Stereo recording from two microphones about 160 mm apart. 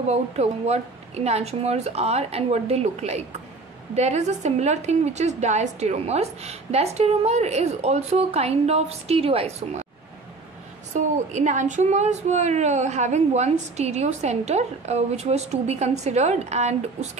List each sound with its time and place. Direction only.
0.1 s a woman's voice: 40° right (ahead or behind)
10.9 s a woman's voice: 50° right (ahead or behind)